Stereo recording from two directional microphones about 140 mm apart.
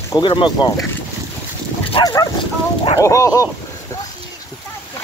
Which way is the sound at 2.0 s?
25° left (ahead or behind).